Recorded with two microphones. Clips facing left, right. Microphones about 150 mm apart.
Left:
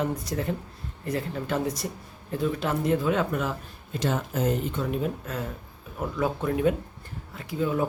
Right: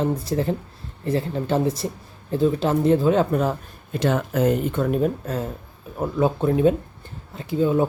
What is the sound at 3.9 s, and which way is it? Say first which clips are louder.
Speech: right 6 dB; 65° right (ahead or behind).